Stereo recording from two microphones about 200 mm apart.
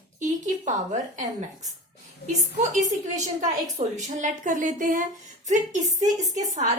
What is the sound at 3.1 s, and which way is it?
A woman's voice, 35° right (ahead or behind).